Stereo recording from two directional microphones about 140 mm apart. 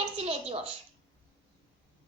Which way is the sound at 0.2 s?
45° right (ahead or behind).